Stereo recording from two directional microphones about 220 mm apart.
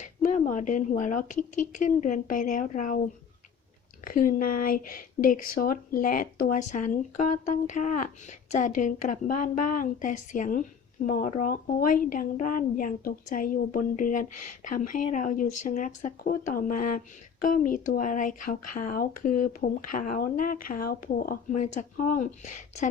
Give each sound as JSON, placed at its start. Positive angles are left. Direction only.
{"t": 0.0, "sound": "a woman's voice", "side_deg": 35}
{"t": 4.0, "sound": "a woman's voice", "side_deg": 40}